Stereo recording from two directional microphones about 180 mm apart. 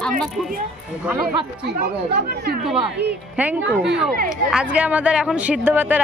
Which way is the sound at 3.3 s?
5° right (ahead or behind).